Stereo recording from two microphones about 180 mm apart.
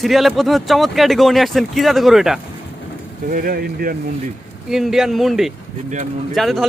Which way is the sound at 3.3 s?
55° right (ahead or behind).